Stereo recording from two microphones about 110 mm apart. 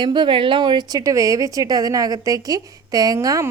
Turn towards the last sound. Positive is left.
turn(degrees=-35)  # may be behind; listen again after turning